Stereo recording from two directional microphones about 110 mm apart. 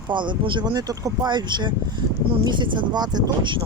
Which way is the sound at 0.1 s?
45° right (ahead or behind).